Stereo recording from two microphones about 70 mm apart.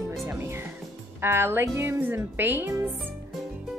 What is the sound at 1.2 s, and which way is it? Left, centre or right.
Speech, right.